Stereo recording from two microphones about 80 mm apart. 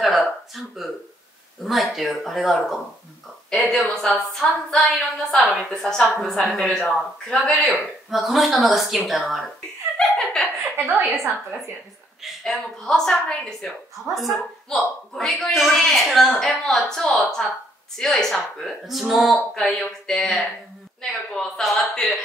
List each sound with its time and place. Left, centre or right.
0.0 s a sound: centre
1.6 s a woman's voice: centre
8.1 s a woman's voice: centre
9.9 s laughter: centre
10.9 s a woman's voice: right
12.2 s a woman's voice: centre